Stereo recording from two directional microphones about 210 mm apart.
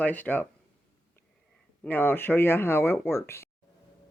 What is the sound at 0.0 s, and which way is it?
Speech, 10° left (ahead or behind).